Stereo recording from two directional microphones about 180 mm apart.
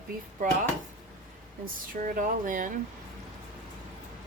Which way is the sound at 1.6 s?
50° right (ahead or behind).